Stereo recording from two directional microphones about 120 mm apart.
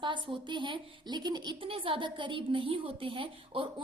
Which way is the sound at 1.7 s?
45° right (ahead or behind).